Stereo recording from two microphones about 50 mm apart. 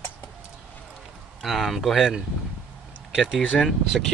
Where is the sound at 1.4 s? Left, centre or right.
Centre.